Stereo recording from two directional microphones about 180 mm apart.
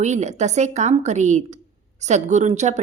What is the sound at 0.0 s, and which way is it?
A woman's voice, 40° right (ahead or behind).